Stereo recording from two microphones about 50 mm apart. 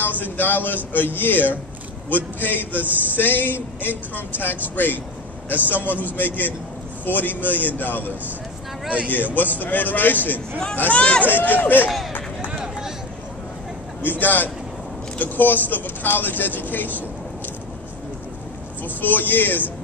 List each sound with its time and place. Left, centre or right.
0.0 s speech: left
8.8 s speech: right
9.1 s speech: left
12.5 s a sound: centre
14.0 s speech: left
18.9 s speech: left